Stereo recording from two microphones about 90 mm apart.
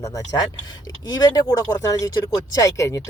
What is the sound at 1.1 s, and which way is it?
Speech, 45° left (ahead or behind).